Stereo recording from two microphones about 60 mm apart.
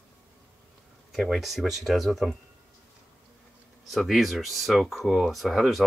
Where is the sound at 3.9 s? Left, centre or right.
Centre.